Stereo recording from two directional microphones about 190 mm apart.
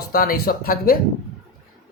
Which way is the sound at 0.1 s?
50° left (ahead or behind).